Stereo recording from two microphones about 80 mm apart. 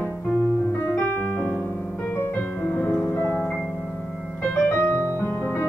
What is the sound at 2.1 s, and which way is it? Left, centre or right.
Music, left.